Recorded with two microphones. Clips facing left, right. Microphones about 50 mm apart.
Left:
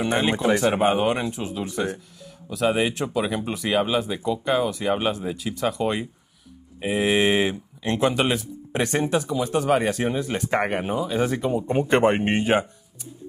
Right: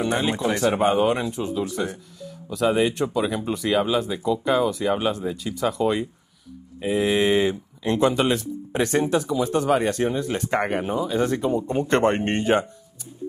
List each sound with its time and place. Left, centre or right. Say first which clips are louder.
0.0 s speech: left 1 dB; left; by 12.6 s centre